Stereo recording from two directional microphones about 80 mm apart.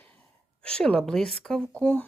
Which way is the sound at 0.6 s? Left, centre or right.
Centre.